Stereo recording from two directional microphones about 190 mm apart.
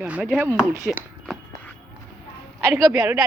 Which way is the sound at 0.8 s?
Centre (ahead or behind).